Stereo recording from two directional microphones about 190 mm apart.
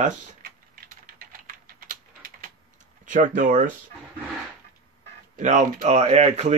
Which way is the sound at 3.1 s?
45° right (ahead or behind).